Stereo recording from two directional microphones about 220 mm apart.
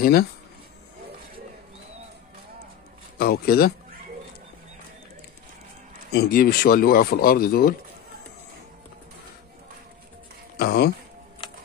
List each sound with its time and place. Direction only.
0.0 s speech: 45° left (ahead or behind)
3.2 s speech: 45° left (ahead or behind)
6.1 s speech: 45° left (ahead or behind)
10.6 s speech: 45° left (ahead or behind)